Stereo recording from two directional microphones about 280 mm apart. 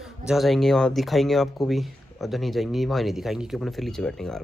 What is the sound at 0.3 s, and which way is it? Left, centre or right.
Speech, centre.